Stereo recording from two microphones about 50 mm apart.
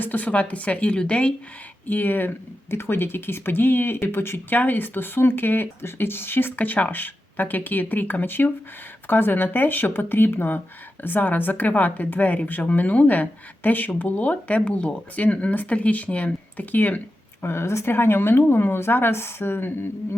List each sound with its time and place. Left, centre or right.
0.0 s a woman's voice: left
1.9 s speech: left
2.6 s speech: left
4.5 s speech: left
6.6 s speech: left
17.4 s speech: left